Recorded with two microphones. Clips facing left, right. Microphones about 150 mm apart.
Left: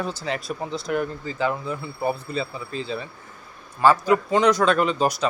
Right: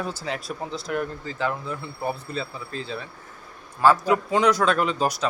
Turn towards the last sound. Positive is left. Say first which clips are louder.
# left 2 dB
turn(degrees=0)  # may be behind; listen again after turning